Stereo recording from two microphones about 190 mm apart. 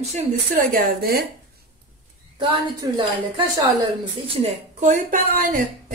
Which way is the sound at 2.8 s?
20° right (ahead or behind).